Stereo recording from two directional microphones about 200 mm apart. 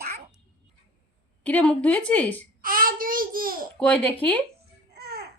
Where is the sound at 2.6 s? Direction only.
45° right (ahead or behind).